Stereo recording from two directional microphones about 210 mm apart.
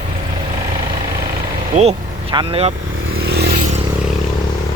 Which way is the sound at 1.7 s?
35° right (ahead or behind).